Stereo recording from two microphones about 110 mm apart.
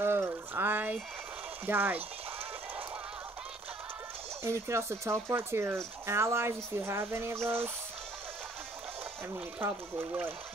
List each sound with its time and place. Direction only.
0.0 s a sound: 20° right (ahead or behind)
1.7 s speech: 20° right (ahead or behind)
4.4 s speech: 25° right (ahead or behind)
9.3 s speech: 20° right (ahead or behind)